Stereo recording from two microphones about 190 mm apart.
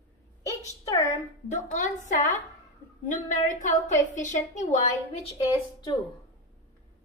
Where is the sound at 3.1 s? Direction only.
40° left (ahead or behind).